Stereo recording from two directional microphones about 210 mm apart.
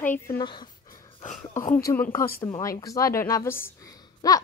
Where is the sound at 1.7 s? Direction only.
10° left (ahead or behind).